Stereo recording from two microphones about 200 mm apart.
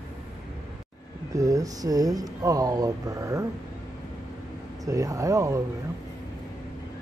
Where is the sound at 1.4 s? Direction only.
15° right (ahead or behind).